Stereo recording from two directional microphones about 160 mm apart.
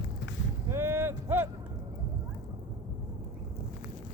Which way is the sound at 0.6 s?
15° right (ahead or behind).